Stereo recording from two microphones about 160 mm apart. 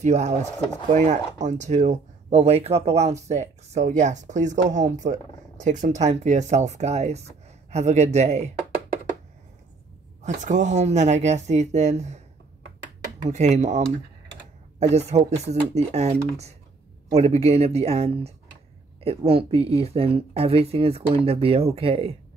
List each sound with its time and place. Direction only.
0.0 s speech: 45° right (ahead or behind)
10.2 s speech: 50° right (ahead or behind)
13.3 s speech: 45° right (ahead or behind)